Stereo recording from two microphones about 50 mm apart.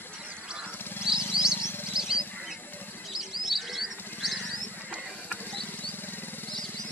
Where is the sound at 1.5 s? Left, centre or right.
Left.